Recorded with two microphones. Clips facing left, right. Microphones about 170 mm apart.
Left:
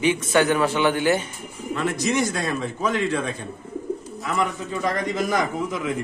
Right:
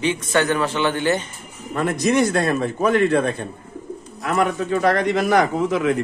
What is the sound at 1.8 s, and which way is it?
A man's voice, 55° right (ahead or behind).